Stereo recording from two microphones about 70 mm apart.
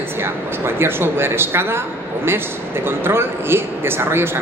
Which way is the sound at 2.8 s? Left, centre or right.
Right.